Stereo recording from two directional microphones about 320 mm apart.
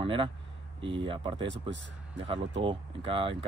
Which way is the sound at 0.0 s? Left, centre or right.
Centre.